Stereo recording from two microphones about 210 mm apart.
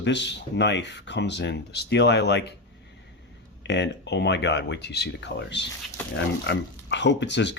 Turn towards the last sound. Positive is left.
turn(degrees=55)  # may be behind; listen again after turning